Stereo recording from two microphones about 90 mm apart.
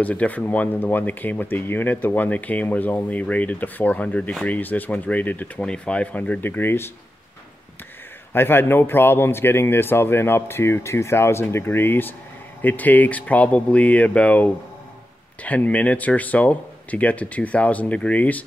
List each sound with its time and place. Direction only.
0.0 s speech: 15° left (ahead or behind)
8.3 s speech: 25° left (ahead or behind)